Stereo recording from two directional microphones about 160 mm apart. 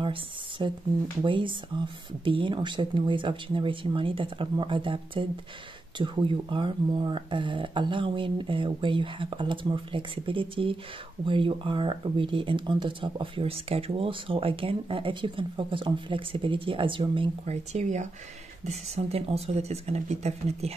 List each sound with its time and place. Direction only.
0.0 s a sound: 30° right (ahead or behind)
1.2 s speech: 30° right (ahead or behind)
17.7 s speech: 45° right (ahead or behind)